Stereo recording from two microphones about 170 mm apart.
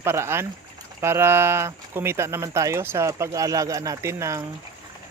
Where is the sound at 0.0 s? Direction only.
15° right (ahead or behind).